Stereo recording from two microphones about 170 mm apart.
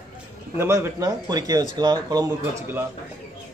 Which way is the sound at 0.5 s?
15° right (ahead or behind).